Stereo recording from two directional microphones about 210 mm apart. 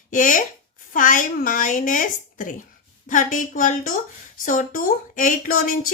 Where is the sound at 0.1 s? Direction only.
40° left (ahead or behind).